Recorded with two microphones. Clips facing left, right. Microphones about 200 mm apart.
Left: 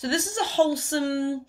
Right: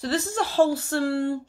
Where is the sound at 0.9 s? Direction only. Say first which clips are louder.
Right 1 dB; 20° left (ahead or behind).